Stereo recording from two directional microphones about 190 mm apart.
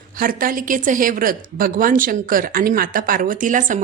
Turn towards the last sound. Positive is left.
turn(degrees=-45)  # may be behind; listen again after turning